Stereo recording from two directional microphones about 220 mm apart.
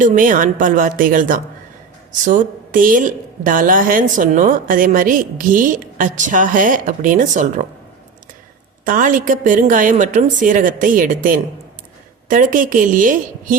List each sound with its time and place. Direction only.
0.0 s a woman's voice: 35° right (ahead or behind)
8.8 s a woman's voice: 35° right (ahead or behind)